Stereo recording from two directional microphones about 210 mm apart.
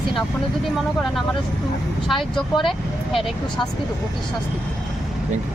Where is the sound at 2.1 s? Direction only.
Centre (ahead or behind).